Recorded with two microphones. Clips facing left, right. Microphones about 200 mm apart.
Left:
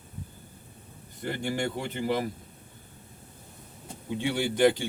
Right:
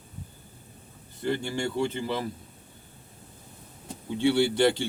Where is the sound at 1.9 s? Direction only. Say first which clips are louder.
Left 2 dB; 15° left (ahead or behind).